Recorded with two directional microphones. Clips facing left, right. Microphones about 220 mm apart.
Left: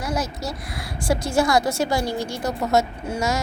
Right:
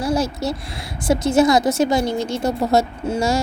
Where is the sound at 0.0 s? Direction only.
30° right (ahead or behind).